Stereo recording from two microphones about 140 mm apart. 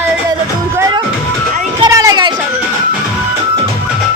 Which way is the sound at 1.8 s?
25° right (ahead or behind).